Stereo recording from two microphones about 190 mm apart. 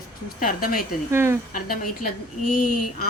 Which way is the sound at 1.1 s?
15° right (ahead or behind).